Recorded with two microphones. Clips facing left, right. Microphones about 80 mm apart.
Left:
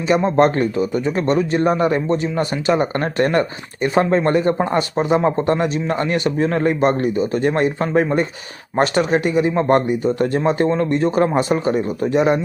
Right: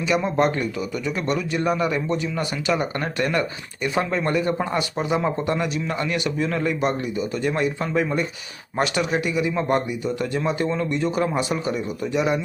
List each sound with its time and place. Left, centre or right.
0.1 s speech: left
0.3 s speech: left